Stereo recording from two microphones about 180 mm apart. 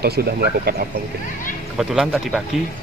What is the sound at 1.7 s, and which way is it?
Speech, 5° right (ahead or behind).